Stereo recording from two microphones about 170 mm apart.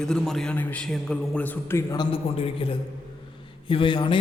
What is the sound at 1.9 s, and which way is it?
A man's voice, 30° left (ahead or behind).